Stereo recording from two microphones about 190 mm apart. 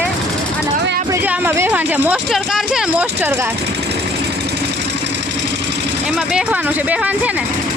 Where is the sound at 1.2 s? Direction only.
10° right (ahead or behind).